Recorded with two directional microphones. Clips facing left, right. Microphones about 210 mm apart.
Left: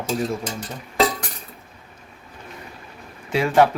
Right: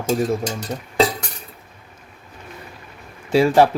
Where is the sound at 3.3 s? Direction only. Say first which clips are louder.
Right 3 dB; 30° right (ahead or behind).